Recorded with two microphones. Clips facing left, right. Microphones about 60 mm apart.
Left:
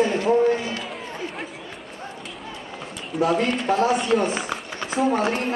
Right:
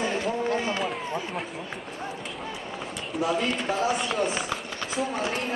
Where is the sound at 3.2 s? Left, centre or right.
Left.